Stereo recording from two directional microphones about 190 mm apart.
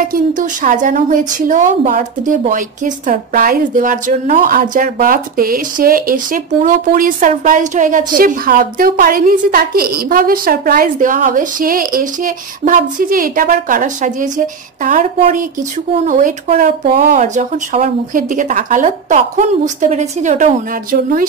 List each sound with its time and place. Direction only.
0.1 s a woman's voice: 45° right (ahead or behind)